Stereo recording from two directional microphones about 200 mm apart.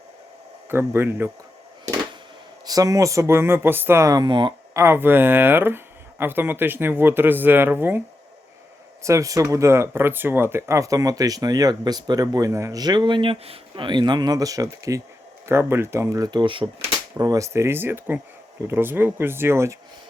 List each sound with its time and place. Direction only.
0.7 s speech: 10° right (ahead or behind)
2.6 s speech: 15° right (ahead or behind)
9.0 s speech: 15° right (ahead or behind)